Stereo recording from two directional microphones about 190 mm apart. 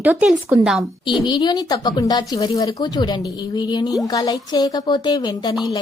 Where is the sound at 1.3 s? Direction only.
20° left (ahead or behind).